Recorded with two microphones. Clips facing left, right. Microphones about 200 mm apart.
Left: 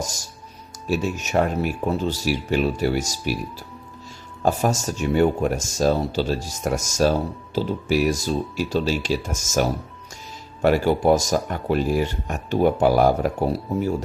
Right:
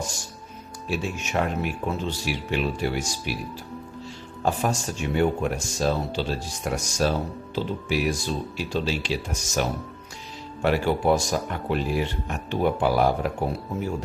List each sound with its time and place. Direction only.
0.0 s speech: 40° left (ahead or behind)
4.4 s speech: 45° left (ahead or behind)